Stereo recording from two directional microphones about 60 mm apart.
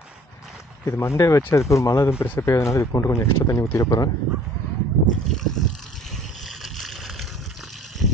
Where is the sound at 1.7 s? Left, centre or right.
Left.